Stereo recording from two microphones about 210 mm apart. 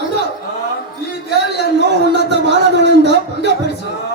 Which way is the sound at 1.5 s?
55° right (ahead or behind).